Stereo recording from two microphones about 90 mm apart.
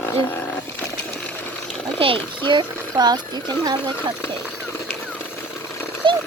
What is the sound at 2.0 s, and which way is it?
A child's voice, 70° right (ahead or behind).